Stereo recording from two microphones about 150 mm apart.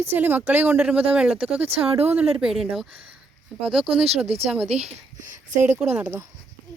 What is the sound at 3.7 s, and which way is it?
Speech, centre (ahead or behind).